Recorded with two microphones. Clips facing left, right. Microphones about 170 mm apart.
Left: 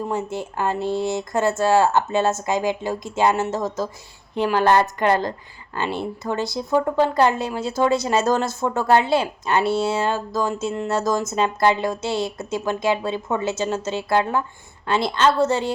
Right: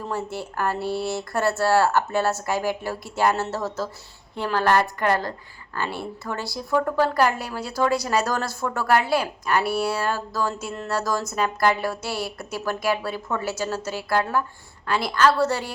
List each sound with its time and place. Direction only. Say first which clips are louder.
0.0 s a woman's voice: left 4 dB; 20° left (ahead or behind)